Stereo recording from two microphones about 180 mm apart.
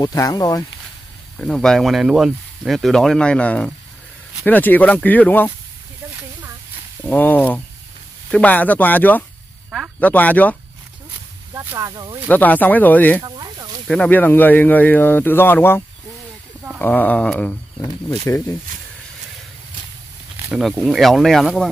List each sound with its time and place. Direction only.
0.0 s speech: 20° left (ahead or behind)
1.4 s speech: 5° left (ahead or behind)
6.0 s a sound: 10° right (ahead or behind)
7.0 s speech: 10° left (ahead or behind)
11.5 s speech: 15° right (ahead or behind)
12.3 s speech: 10° left (ahead or behind)
13.2 s a sound: 25° right (ahead or behind)
13.8 s speech: 5° left (ahead or behind)
20.3 s speech: 5° right (ahead or behind)